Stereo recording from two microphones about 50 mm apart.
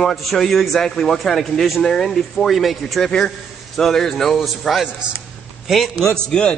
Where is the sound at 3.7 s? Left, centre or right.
Centre.